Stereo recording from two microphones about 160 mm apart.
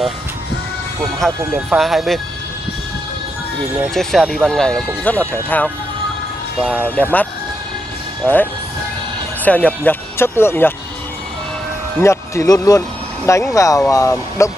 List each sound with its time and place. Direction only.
1.2 s speech: centre (ahead or behind)
3.9 s speech: centre (ahead or behind)
12.0 s speech: 15° left (ahead or behind)